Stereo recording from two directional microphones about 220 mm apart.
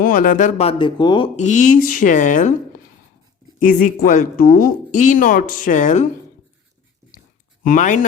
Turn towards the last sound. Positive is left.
turn(degrees=35)  # may be behind; listen again after turning